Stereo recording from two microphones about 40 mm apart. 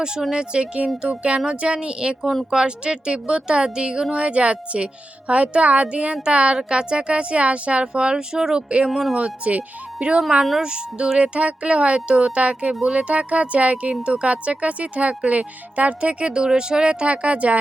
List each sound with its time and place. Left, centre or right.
0.2 s speech: centre
8.9 s speech: centre
9.4 s speech: right
10.2 s speech: centre
10.6 s speech: right